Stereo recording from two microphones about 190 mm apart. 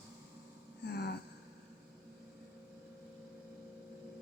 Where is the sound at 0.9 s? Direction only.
60° left (ahead or behind).